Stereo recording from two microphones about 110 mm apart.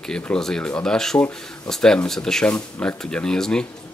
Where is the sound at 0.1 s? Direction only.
5° left (ahead or behind).